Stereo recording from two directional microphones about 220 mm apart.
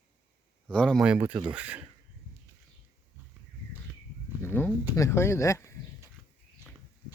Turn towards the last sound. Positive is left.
turn(degrees=15)  # may be behind; listen again after turning